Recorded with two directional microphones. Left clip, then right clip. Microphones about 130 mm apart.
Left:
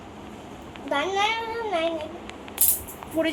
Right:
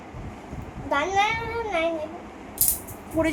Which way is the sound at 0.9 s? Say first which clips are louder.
Right 2 dB; 5° right (ahead or behind).